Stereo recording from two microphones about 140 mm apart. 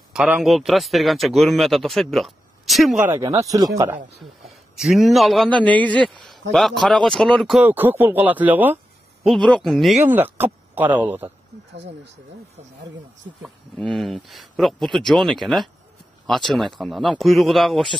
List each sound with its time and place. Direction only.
0.1 s speech: 5° right (ahead or behind)
3.2 s speech: 25° right (ahead or behind)
4.7 s speech: centre (ahead or behind)
7.6 s speech: 15° right (ahead or behind)
9.2 s speech: 5° left (ahead or behind)
10.0 s speech: 15° right (ahead or behind)
13.4 s speech: 5° left (ahead or behind)